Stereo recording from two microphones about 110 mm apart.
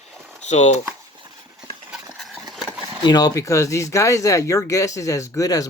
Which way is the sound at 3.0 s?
35° left (ahead or behind).